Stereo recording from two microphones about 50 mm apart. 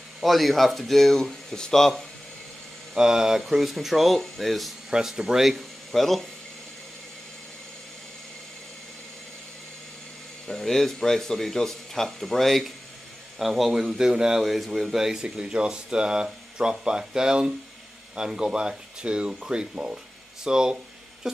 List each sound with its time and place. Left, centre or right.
0.2 s speech: centre
2.9 s speech: centre
4.9 s speech: centre
5.9 s speech: centre
10.4 s speech: centre